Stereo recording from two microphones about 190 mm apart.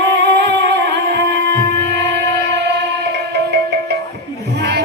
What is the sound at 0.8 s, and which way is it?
Music, 65° right (ahead or behind).